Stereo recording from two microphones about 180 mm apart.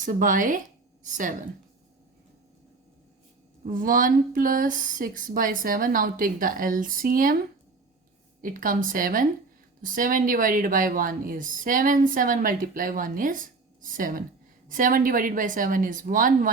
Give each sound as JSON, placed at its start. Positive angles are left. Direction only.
{"t": 0.0, "sound": "speech", "side_deg": -45}
{"t": 3.6, "sound": "speech", "side_deg": -50}
{"t": 8.4, "sound": "speech", "side_deg": -50}